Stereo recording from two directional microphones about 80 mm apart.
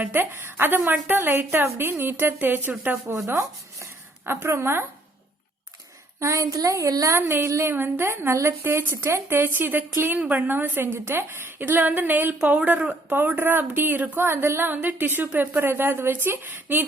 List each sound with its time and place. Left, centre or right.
0.0 s a woman's voice: right
3.2 s chopping: right
4.3 s a woman's voice: right
6.1 s a woman's voice: right
7.2 s a woman's voice: right
14.3 s a woman's voice: right